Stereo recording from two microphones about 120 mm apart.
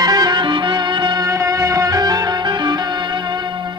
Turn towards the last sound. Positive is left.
turn(degrees=-40)  # may be behind; listen again after turning